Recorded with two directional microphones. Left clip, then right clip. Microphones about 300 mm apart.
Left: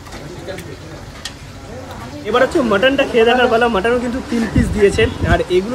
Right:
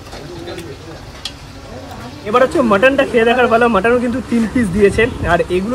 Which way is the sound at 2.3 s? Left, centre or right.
Centre.